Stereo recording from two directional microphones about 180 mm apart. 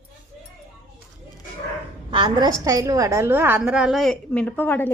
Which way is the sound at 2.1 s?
25° right (ahead or behind).